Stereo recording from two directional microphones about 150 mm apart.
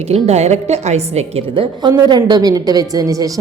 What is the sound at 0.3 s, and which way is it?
A woman's voice, 45° right (ahead or behind).